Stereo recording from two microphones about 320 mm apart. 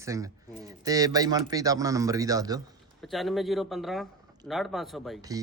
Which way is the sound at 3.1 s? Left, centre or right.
Centre.